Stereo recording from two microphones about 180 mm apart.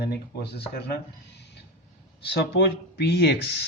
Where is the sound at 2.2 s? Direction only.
65° left (ahead or behind).